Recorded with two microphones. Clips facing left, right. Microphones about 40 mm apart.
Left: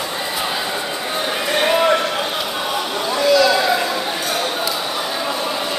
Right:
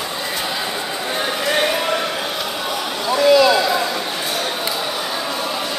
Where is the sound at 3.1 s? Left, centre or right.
Centre.